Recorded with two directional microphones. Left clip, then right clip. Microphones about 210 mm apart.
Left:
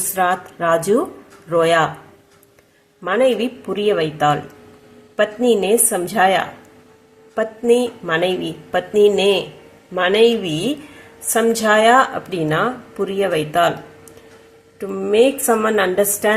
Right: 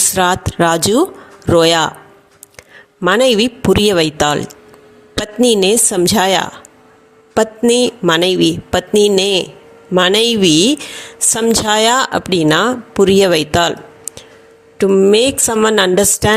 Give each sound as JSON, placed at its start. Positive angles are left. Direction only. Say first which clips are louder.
{"t": 0.1, "sound": "a woman's voice", "louder": "right 4 dB", "side_deg": -50}
{"t": 3.0, "sound": "a woman's voice", "louder": "right 5 dB", "side_deg": -50}